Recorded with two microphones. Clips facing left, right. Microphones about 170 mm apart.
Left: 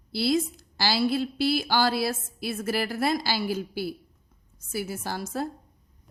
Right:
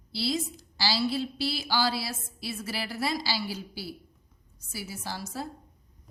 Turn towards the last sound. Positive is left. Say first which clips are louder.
# left 5 dB
turn(degrees=55)  # may be behind; listen again after turning